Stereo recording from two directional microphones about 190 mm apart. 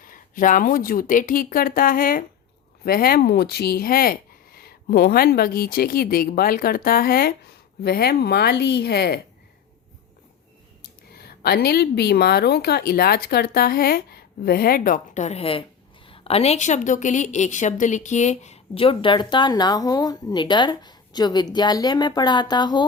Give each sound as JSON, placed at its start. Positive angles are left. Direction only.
{"t": 0.0, "sound": "a woman's voice", "side_deg": 45}
{"t": 11.1, "sound": "a woman's voice", "side_deg": 55}